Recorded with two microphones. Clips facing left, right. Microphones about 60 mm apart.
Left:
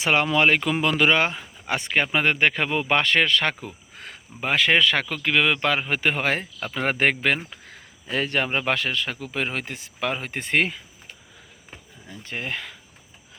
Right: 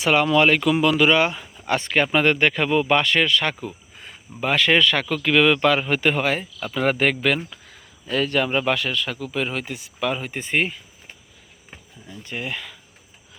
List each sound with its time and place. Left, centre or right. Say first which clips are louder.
0.0 s speech: right 3 dB; left
1.6 s speech: right 3 dB; centre; by 3.5 s left
4.4 s speech: right 2 dB; centre
5.0 s speech: right 4 dB; centre; by 10.7 s left
12.0 s speech: right 1 dB; left